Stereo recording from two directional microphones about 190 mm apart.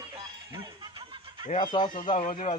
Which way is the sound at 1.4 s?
40° left (ahead or behind).